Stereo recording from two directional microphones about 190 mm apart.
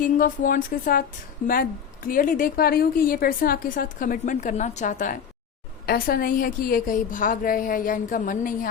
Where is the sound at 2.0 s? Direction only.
45° left (ahead or behind).